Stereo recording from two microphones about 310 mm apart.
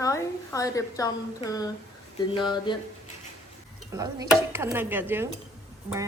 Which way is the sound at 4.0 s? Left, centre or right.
Centre.